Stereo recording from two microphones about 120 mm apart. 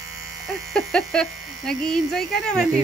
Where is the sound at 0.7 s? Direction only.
5° left (ahead or behind).